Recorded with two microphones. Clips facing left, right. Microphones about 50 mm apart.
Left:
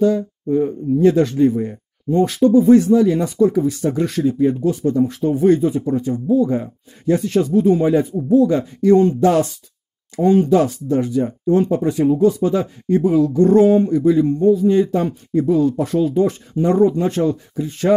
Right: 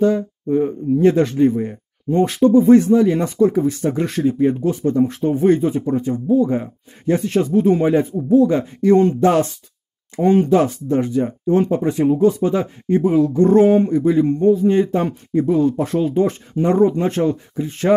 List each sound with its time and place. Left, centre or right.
0.0 s speech: right
9.2 s speech: right
10.2 s speech: right
10.5 s speech: right